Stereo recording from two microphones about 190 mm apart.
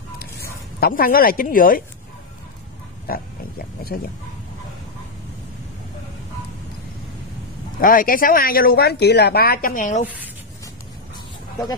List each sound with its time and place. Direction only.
0.2 s a sound: 55° left (ahead or behind)
3.1 s speech: 50° left (ahead or behind)
7.8 s speech: 45° left (ahead or behind)